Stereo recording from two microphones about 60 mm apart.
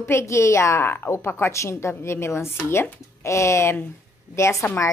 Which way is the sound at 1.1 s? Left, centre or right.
Left.